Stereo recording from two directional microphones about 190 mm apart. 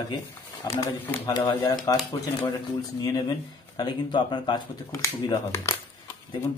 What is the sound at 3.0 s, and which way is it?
Speech, 20° left (ahead or behind).